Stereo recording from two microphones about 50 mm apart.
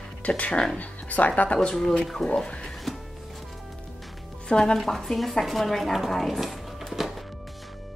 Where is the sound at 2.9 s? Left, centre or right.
Centre.